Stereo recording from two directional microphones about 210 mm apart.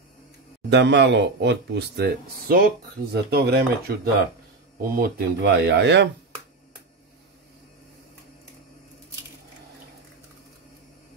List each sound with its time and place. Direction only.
0.7 s speech: 55° right (ahead or behind)